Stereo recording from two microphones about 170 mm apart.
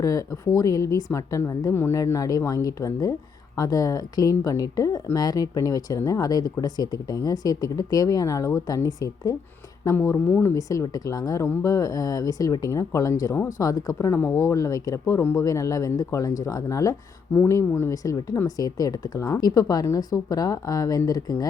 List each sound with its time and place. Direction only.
0.0 s speech: 20° left (ahead or behind)